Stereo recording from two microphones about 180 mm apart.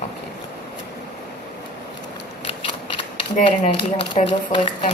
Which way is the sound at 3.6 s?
35° left (ahead or behind).